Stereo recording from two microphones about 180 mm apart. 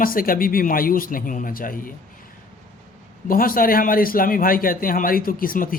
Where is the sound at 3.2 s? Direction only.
50° left (ahead or behind).